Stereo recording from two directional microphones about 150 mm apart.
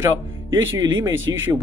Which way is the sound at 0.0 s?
25° right (ahead or behind).